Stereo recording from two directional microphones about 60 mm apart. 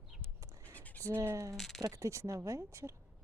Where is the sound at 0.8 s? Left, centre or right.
Left.